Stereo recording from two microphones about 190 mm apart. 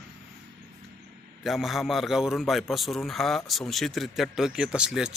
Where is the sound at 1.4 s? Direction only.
Centre (ahead or behind).